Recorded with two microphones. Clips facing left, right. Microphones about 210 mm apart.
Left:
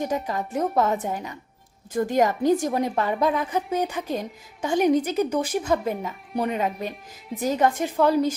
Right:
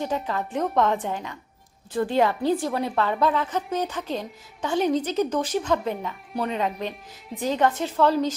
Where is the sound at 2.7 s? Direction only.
15° left (ahead or behind).